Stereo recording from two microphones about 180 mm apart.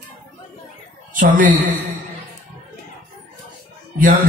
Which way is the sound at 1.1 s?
45° right (ahead or behind).